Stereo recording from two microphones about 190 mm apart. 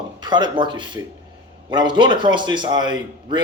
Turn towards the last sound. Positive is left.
turn(degrees=-25)  # may be behind; listen again after turning